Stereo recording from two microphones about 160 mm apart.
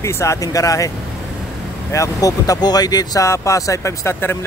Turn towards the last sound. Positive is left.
turn(degrees=15)  # may be behind; listen again after turning